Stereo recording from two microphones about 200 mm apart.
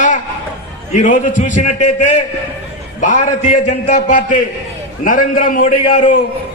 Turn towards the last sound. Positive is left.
turn(degrees=40)  # may be behind; listen again after turning